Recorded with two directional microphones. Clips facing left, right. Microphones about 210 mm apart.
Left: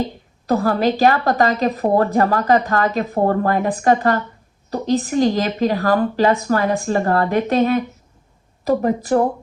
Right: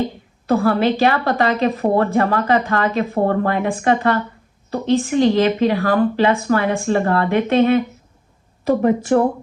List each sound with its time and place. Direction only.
0.4 s a woman's voice: 40° left (ahead or behind)